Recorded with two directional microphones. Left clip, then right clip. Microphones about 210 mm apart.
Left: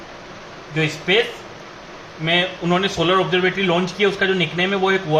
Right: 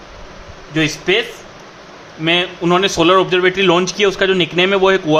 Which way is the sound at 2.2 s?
45° right (ahead or behind).